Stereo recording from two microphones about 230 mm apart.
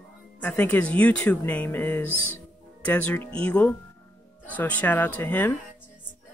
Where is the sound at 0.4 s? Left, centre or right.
Centre.